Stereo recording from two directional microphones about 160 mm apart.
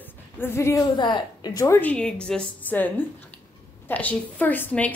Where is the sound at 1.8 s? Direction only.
10° left (ahead or behind).